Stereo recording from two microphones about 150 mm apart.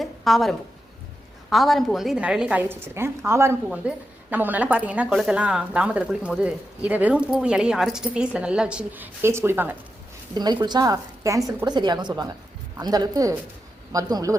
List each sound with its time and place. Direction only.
0.0 s a sound: centre (ahead or behind)
1.5 s a woman's voice: centre (ahead or behind)
10.3 s a woman's voice: 25° right (ahead or behind)